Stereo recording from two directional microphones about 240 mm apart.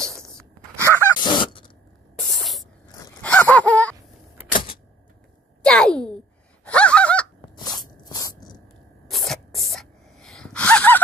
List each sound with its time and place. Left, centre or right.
0.2 s a sound: centre
0.9 s gasp: centre
2.1 s spray: centre
3.0 s gasp: centre
5.7 s a sound: centre
6.6 s gasp: centre
7.6 s a sound: centre
9.1 s spray: centre
9.8 s gasp: centre